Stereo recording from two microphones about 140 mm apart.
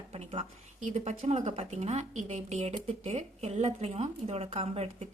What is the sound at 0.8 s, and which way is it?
A woman's voice, 55° right (ahead or behind).